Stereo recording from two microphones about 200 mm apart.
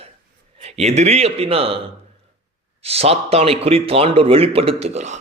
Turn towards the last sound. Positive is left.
turn(degrees=-35)  # may be behind; listen again after turning